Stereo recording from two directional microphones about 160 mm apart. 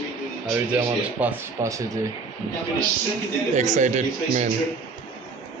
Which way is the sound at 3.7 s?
45° right (ahead or behind).